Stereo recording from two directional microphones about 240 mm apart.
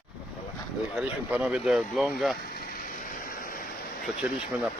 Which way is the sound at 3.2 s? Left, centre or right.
Left.